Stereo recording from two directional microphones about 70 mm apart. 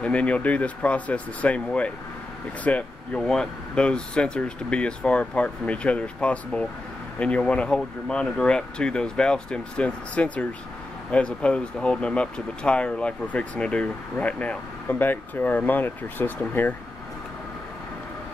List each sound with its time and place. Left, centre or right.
0.0 s speech: centre
3.2 s speech: centre; by 16.7 s left